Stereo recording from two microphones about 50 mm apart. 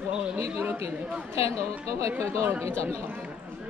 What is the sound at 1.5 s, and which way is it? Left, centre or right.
Speech, right.